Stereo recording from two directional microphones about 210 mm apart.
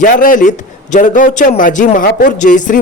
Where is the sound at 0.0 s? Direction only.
40° left (ahead or behind).